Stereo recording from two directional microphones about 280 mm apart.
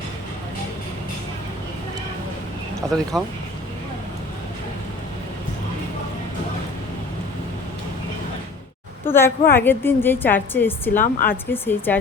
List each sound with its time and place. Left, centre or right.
2.9 s speech: centre
9.0 s a woman's voice: centre
10.9 s a woman's voice: left
11.5 s a woman's voice: centre